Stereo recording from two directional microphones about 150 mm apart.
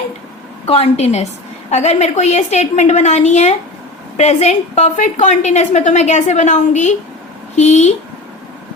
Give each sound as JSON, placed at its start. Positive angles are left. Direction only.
{"t": 0.6, "sound": "a woman's voice", "side_deg": 45}